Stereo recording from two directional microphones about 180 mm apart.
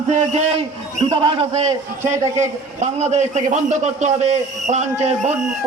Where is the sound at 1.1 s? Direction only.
30° right (ahead or behind).